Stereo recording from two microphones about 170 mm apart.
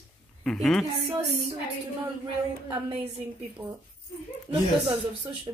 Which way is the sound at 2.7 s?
25° right (ahead or behind).